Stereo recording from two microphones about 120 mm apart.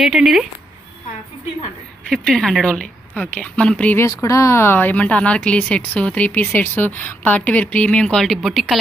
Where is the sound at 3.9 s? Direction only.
25° left (ahead or behind); by 8.8 s centre (ahead or behind).